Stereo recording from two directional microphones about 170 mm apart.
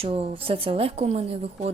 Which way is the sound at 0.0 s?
30° right (ahead or behind).